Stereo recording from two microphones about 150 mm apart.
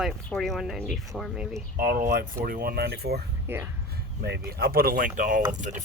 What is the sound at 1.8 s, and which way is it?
Speech, 80° right.